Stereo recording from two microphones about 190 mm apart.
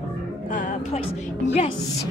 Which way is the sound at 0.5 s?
45° left (ahead or behind).